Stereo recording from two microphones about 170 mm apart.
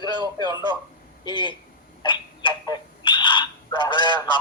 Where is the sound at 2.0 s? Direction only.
25° left (ahead or behind).